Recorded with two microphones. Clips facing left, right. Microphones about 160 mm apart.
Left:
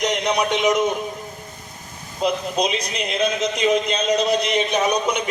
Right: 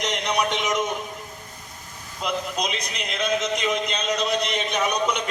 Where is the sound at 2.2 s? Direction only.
35° left (ahead or behind).